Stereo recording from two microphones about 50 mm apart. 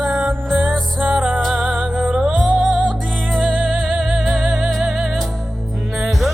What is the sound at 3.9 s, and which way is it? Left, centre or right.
Music, centre.